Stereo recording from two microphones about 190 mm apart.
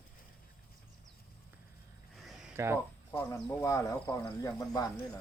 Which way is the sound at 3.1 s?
15° left (ahead or behind).